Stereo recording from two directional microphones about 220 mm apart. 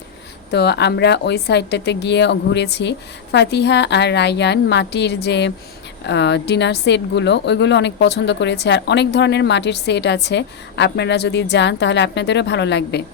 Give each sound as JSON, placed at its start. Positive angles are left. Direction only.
{"t": 0.5, "sound": "a woman's voice", "side_deg": 50}